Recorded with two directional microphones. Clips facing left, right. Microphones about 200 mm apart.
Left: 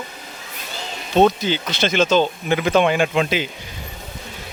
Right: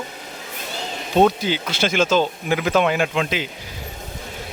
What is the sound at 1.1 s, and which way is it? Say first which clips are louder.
A man's voice: left 1 dB; 10° right (ahead or behind).